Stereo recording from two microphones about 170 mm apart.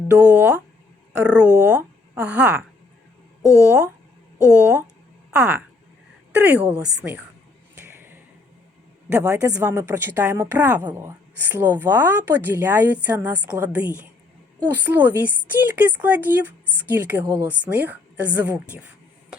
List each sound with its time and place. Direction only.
0.2 s speech: 10° right (ahead or behind)
3.4 s speech: 15° left (ahead or behind)
4.5 s speech: 10° right (ahead or behind)
7.9 s a sound: 10° right (ahead or behind)
9.0 s a woman's voice: 10° right (ahead or behind)